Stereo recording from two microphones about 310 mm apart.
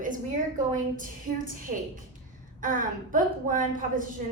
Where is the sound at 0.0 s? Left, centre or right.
Right.